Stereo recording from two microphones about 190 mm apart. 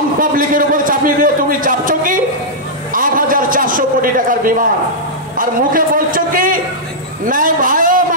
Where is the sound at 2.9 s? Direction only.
45° right (ahead or behind).